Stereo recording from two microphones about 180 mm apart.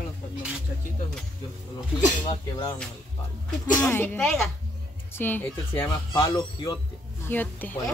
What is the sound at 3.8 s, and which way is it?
Speech, 10° left (ahead or behind).